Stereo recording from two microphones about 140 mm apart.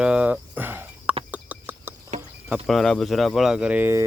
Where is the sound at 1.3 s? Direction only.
10° right (ahead or behind).